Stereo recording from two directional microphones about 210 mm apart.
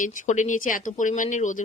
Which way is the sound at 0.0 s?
35° left (ahead or behind).